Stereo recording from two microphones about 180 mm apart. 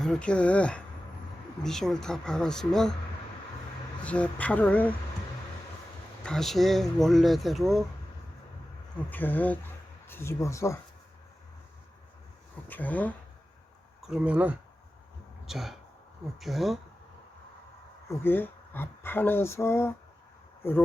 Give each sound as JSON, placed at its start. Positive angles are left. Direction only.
{"t": 0.0, "sound": "speech", "side_deg": 5}
{"t": 4.0, "sound": "speech", "side_deg": 5}
{"t": 6.2, "sound": "speech", "side_deg": 0}
{"t": 9.0, "sound": "speech", "side_deg": 10}
{"t": 12.6, "sound": "speech", "side_deg": 10}
{"t": 14.0, "sound": "speech", "side_deg": -5}
{"t": 18.1, "sound": "speech", "side_deg": 10}